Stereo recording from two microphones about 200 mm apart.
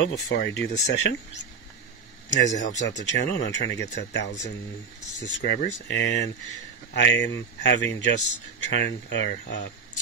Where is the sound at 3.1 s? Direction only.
60° left (ahead or behind).